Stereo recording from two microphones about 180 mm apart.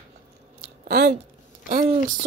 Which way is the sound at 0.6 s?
60° right (ahead or behind).